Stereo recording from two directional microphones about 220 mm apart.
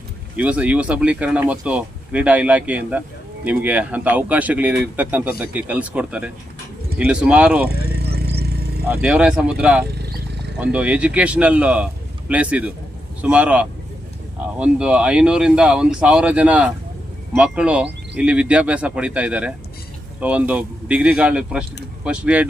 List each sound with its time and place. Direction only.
0.3 s speech: 5° right (ahead or behind)
7.9 s vehicle: 45° right (ahead or behind)
8.9 s speech: 5° right (ahead or behind)
9.8 s vehicle: 45° right (ahead or behind)
10.6 s speech: 5° right (ahead or behind)